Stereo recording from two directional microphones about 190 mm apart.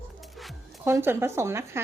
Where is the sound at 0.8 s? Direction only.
10° right (ahead or behind).